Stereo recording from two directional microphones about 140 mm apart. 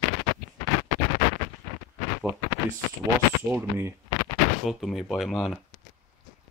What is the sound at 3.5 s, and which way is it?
Speech, 20° right (ahead or behind).